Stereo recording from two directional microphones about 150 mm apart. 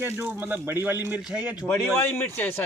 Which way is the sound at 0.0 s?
15° right (ahead or behind).